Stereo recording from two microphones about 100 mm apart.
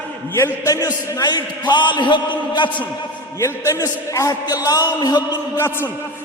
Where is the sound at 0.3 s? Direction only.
25° left (ahead or behind).